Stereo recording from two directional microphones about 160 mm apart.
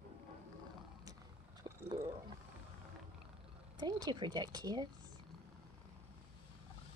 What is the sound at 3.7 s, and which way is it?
Speech, 25° right (ahead or behind).